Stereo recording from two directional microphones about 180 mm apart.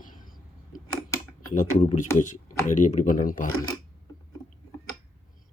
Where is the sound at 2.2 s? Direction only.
45° left (ahead or behind).